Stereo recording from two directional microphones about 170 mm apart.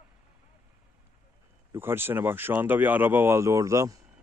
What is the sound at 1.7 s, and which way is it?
Speech, 15° right (ahead or behind).